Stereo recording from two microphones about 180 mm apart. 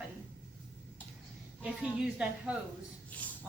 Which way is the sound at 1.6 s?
5° right (ahead or behind).